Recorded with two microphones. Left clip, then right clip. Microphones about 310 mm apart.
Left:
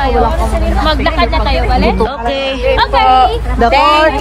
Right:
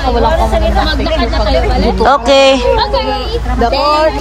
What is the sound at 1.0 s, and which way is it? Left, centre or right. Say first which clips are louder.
Speech: left 1 dB; left.